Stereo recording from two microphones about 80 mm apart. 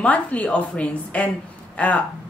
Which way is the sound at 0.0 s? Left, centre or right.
Centre.